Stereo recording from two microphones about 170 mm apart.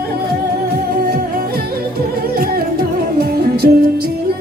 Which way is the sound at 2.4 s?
60° right (ahead or behind).